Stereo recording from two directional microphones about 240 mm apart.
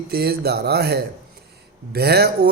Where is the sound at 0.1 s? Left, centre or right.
Right.